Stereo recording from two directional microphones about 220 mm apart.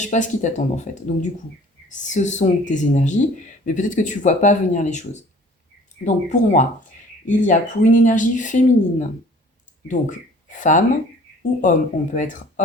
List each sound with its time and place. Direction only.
0.0 s speech: 35° left (ahead or behind)